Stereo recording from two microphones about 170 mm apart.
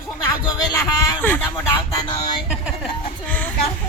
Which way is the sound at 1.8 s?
30° left (ahead or behind).